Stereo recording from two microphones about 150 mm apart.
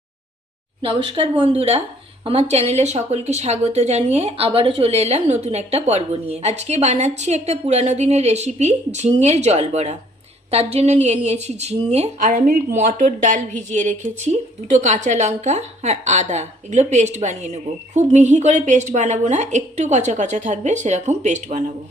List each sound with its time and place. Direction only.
0.8 s a woman's voice: 40° right (ahead or behind)